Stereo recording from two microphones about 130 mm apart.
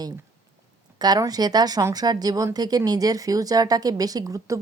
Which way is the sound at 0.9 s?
30° right (ahead or behind).